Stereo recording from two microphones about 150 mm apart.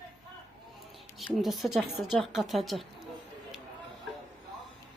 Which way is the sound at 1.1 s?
Centre (ahead or behind).